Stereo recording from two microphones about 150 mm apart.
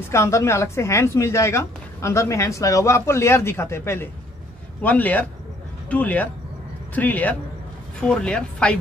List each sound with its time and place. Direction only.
0.1 s a woman's voice: 20° left (ahead or behind)